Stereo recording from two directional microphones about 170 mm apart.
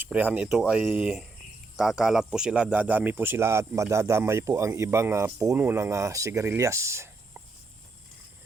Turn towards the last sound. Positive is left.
turn(degrees=-15)  # may be behind; listen again after turning